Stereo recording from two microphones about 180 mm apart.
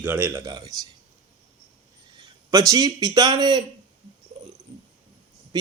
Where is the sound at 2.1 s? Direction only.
25° right (ahead or behind).